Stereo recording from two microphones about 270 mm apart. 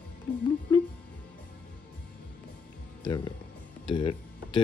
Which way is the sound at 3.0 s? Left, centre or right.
Centre.